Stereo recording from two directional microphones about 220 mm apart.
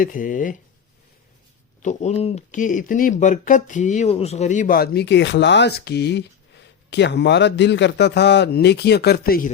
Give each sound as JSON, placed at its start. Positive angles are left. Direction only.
{"t": 0.0, "sound": "speech", "side_deg": 40}
{"t": 1.8, "sound": "a man's voice", "side_deg": 30}